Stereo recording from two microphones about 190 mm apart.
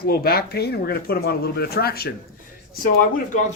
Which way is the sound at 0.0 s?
50° left (ahead or behind).